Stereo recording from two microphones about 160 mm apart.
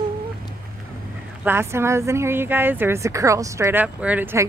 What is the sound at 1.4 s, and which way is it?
Speech, 15° right (ahead or behind).